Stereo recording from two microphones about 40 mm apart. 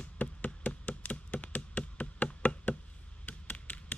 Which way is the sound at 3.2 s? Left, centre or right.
Left.